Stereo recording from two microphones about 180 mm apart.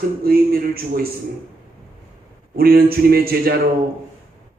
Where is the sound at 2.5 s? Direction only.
60° right (ahead or behind).